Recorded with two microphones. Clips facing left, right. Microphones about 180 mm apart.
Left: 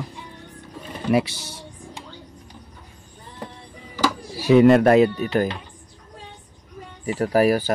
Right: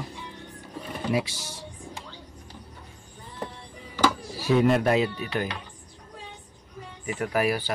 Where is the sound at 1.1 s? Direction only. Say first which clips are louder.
Left 7 dB; 65° left (ahead or behind).